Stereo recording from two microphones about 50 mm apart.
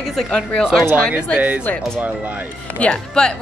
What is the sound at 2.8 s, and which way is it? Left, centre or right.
Speech, left.